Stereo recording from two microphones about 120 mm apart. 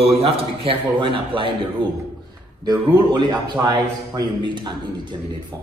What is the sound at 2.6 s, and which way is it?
A man's voice, 35° right (ahead or behind).